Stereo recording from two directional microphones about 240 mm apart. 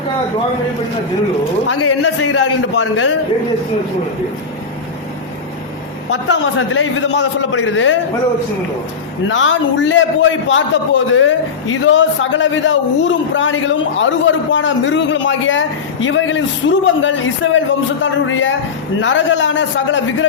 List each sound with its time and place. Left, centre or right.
1.6 s a man's voice: left
2.0 s a man's voice: left
6.1 s a man's voice: left
9.3 s a man's voice: left